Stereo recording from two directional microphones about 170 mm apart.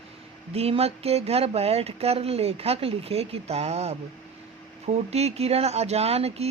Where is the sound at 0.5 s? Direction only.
35° right (ahead or behind).